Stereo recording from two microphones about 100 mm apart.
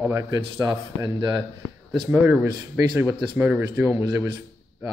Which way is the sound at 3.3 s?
20° right (ahead or behind).